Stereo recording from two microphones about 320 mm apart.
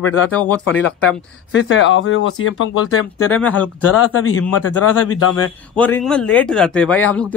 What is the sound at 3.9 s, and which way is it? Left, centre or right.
Speech, left.